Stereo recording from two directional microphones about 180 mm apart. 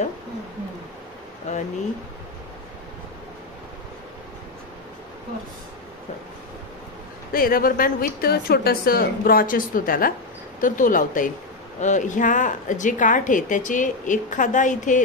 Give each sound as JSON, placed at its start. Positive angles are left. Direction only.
{"t": 1.5, "sound": "speech", "side_deg": 40}
{"t": 7.3, "sound": "a woman's voice", "side_deg": 55}